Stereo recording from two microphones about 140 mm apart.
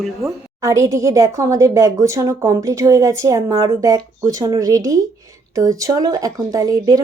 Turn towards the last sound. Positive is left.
turn(degrees=-25)  # may be behind; listen again after turning